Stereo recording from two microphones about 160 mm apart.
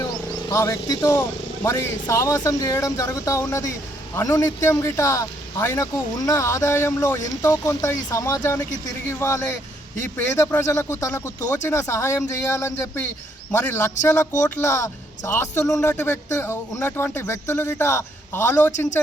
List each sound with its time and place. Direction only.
0.0 s speech: 20° left (ahead or behind)